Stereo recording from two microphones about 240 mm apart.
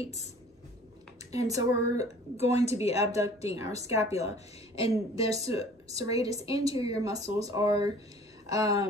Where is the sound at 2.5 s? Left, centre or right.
Left.